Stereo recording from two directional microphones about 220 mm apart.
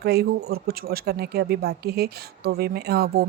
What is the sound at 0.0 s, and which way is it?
Speech, 45° right (ahead or behind).